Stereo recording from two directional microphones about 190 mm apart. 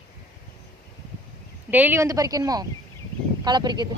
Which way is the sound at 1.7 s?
10° right (ahead or behind).